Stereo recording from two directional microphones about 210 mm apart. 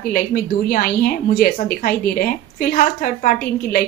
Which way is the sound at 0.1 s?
45° left (ahead or behind).